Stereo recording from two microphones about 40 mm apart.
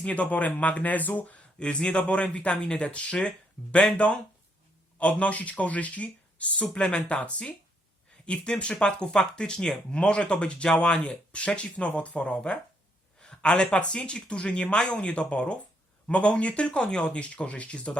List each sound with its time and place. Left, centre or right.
0.0 s speech: left
1.5 s speech: left
4.9 s speech: left